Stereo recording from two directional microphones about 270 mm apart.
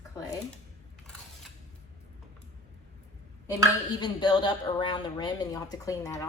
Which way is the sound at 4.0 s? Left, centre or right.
Centre.